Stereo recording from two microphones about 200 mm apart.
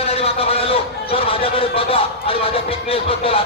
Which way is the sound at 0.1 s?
30° left (ahead or behind).